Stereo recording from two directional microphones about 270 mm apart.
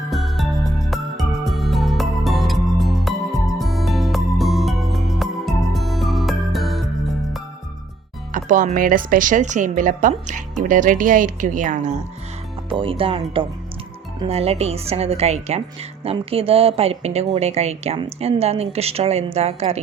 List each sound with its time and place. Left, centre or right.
0.1 s music: centre
8.3 s speech: right